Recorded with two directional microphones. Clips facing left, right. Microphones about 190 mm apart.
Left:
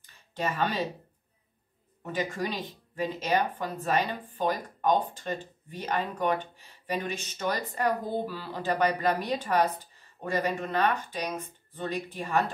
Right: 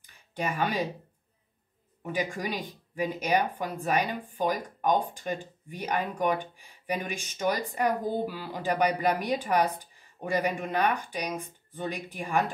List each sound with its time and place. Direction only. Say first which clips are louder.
0.4 s speech: even; 10° right (ahead or behind)
2.0 s speech: even; 15° right (ahead or behind)